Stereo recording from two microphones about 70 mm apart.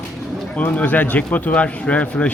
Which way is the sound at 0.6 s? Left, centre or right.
Left.